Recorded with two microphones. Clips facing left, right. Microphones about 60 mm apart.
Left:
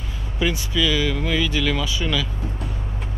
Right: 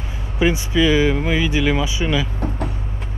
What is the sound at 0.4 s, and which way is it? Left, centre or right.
Speech, right.